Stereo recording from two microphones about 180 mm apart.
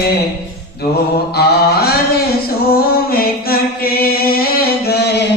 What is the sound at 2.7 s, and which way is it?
Music, 55° left (ahead or behind).